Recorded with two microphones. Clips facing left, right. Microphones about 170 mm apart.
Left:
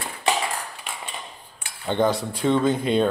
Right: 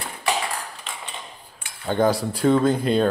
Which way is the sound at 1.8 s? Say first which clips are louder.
Right 1 dB; 5° right (ahead or behind).